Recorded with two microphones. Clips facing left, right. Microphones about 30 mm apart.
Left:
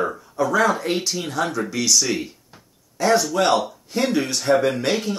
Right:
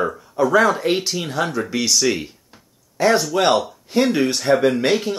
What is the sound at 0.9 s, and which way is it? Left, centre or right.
Speech, centre.